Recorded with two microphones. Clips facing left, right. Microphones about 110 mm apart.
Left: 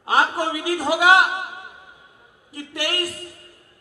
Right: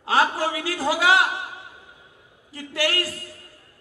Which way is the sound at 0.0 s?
20° left (ahead or behind).